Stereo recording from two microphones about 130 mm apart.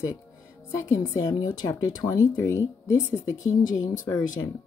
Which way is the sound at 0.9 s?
25° left (ahead or behind).